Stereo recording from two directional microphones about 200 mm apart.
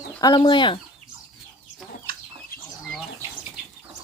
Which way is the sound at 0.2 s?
20° left (ahead or behind).